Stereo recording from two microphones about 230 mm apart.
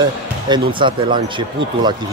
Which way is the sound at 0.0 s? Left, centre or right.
Centre.